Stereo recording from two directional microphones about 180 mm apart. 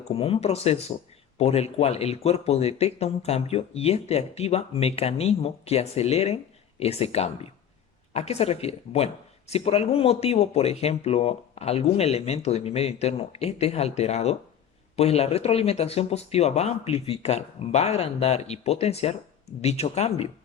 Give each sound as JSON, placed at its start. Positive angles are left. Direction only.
{"t": 0.0, "sound": "speech", "side_deg": 35}